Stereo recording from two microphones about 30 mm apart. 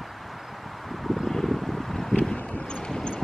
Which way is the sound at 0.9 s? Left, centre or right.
Centre.